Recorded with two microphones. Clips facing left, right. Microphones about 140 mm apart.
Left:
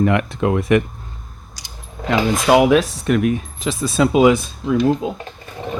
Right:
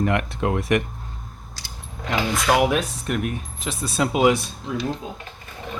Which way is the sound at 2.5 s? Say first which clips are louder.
Left 7 dB; 90° left.